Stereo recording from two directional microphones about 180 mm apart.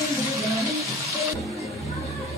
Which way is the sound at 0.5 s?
15° right (ahead or behind).